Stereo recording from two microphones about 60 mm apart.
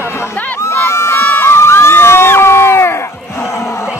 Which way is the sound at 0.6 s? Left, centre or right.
Left.